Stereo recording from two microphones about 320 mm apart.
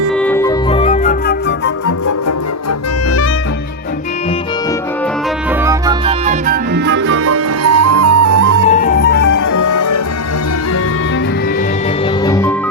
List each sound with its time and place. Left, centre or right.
0.2 s music: centre; by 1.4 s left
5.6 s music: centre; by 8.6 s right
8.7 s music: left
9.5 s music: left
12.2 s music: centre